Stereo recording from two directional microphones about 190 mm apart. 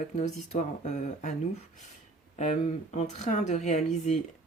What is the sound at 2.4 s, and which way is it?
Speech, 40° left (ahead or behind).